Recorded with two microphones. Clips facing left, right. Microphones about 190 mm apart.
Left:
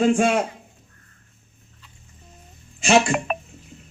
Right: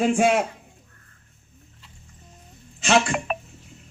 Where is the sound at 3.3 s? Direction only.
55° left (ahead or behind).